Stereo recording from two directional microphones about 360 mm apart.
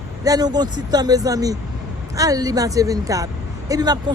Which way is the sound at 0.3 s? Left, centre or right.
Centre.